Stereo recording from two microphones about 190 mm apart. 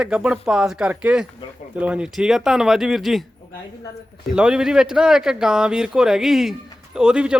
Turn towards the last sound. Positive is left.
turn(degrees=-5)  # may be behind; listen again after turning